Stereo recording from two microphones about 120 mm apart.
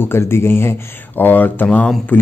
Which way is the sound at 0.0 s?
20° left (ahead or behind).